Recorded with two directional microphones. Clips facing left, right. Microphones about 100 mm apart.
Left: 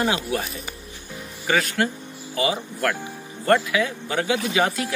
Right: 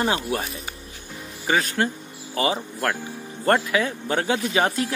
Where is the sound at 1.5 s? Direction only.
30° right (ahead or behind).